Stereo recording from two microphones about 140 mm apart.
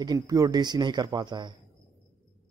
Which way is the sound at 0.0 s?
25° right (ahead or behind).